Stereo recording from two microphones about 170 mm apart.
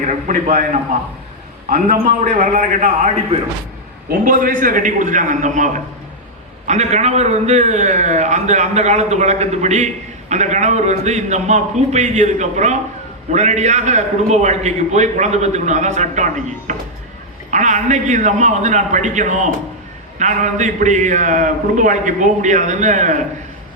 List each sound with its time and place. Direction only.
0.3 s a man's voice: 50° right (ahead or behind)
2.4 s a man's voice: 50° right (ahead or behind)
4.1 s a man's voice: 55° right (ahead or behind)